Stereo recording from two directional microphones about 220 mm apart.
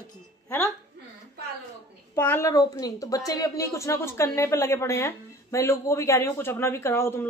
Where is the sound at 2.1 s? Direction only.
10° left (ahead or behind).